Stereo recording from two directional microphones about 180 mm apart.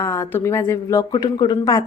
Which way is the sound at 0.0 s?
15° left (ahead or behind).